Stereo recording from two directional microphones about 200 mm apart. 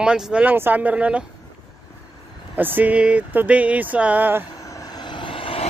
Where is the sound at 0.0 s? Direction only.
5° right (ahead or behind).